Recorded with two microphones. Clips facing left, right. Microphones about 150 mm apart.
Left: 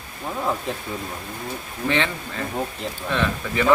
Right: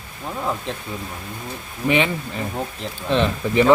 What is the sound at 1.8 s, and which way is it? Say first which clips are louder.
Speech: right 4 dB; 15° right (ahead or behind).